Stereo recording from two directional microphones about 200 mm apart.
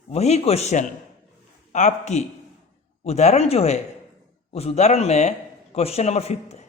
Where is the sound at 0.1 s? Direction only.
35° left (ahead or behind).